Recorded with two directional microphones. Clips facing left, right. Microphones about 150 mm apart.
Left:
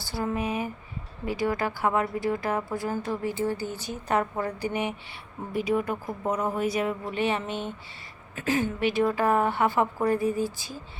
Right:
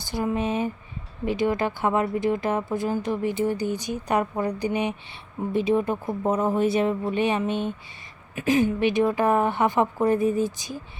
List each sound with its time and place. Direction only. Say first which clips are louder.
0.0 s speech: right 3 dB; 20° right (ahead or behind)